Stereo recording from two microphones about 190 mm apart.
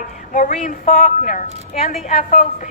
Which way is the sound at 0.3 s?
40° left (ahead or behind).